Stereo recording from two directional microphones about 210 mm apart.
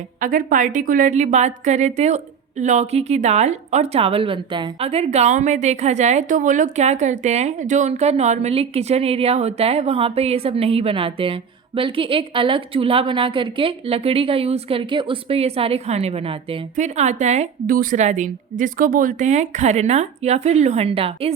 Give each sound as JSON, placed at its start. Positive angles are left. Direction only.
{"t": 0.2, "sound": "a woman's voice", "side_deg": -40}